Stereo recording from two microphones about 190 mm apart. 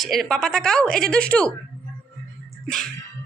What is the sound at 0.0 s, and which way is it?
A woman's voice, centre (ahead or behind).